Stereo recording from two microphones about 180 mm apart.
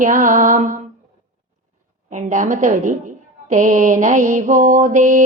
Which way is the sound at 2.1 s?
45° right (ahead or behind).